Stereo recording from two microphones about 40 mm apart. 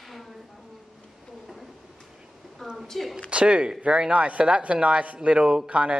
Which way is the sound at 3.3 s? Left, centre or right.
Right.